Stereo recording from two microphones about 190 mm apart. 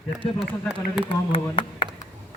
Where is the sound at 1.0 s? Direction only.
30° left (ahead or behind).